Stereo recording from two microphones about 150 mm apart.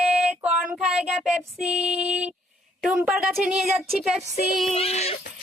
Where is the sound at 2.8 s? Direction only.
5° right (ahead or behind).